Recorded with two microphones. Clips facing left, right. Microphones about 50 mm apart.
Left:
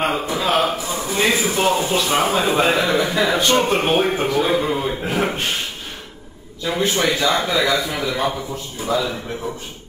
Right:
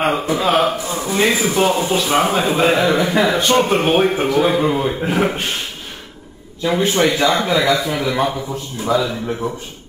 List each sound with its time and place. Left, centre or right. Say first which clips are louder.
0.4 s a man's voice: right 1 dB; centre
6.8 s speech: right 2 dB; right
7.2 s a man's voice: right 3 dB; centre